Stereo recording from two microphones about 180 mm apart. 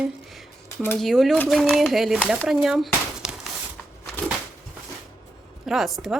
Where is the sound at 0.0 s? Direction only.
Centre (ahead or behind).